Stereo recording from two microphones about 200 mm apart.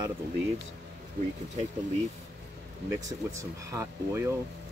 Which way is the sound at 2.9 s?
15° right (ahead or behind).